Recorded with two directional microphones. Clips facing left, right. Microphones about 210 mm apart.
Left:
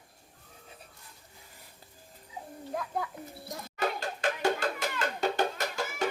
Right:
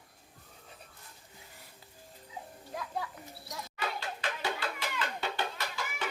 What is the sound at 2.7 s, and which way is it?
Music, 50° left (ahead or behind).